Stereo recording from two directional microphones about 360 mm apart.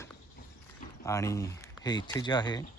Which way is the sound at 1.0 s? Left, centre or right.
Centre.